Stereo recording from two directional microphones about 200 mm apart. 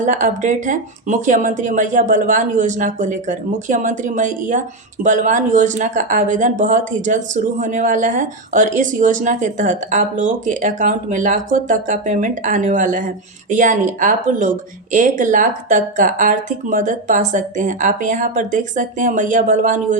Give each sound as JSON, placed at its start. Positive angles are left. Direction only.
{"t": 0.0, "sound": "a woman's voice", "side_deg": -40}